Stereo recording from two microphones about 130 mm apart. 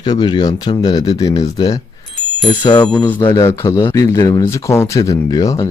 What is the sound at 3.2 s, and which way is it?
Speech, 30° left (ahead or behind).